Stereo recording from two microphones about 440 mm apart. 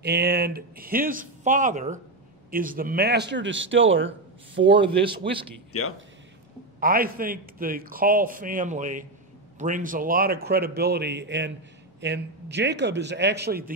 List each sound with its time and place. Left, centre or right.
0.0 s a man's voice: right
5.7 s a man's voice: left
6.8 s a man's voice: centre